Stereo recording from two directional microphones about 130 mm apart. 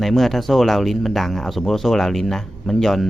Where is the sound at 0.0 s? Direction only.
Centre (ahead or behind).